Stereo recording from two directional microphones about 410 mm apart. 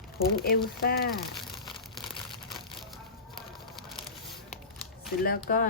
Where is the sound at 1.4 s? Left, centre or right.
Centre.